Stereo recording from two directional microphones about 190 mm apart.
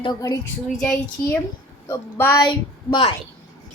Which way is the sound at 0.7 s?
5° left (ahead or behind).